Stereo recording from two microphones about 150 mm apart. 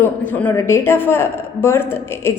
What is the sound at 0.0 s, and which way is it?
Speech, 15° left (ahead or behind).